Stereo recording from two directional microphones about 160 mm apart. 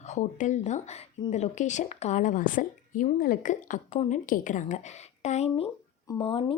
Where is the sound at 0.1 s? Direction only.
50° left (ahead or behind).